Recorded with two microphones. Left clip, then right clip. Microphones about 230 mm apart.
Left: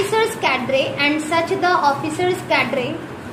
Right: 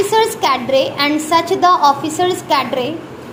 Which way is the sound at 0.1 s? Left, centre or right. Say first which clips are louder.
Right 4 dB; right.